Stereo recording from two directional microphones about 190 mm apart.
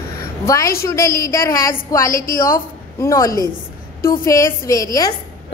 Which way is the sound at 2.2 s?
45° left (ahead or behind).